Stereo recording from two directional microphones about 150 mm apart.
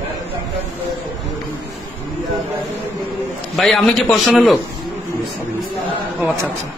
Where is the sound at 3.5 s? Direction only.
Centre (ahead or behind).